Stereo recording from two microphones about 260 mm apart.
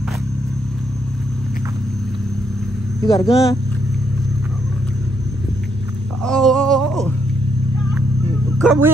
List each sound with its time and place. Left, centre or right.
3.1 s speech: centre
6.2 s a sound: centre
8.5 s speech: centre